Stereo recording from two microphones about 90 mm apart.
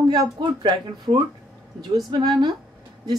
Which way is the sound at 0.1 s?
55° right (ahead or behind).